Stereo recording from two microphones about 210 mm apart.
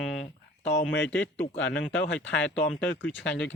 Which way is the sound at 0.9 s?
60° left (ahead or behind).